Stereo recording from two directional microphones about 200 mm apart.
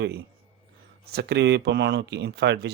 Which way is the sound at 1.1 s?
55° right (ahead or behind).